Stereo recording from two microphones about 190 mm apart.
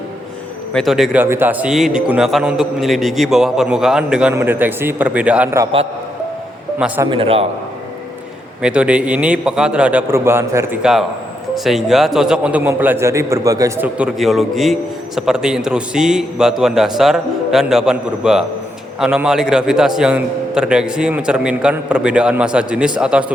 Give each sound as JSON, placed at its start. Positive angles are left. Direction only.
{"t": 0.7, "sound": "a man's voice", "side_deg": 0}
{"t": 6.7, "sound": "a man's voice", "side_deg": -5}
{"t": 7.0, "sound": "a man's voice", "side_deg": -25}
{"t": 8.6, "sound": "a man's voice", "side_deg": -5}
{"t": 11.5, "sound": "a man's voice", "side_deg": 0}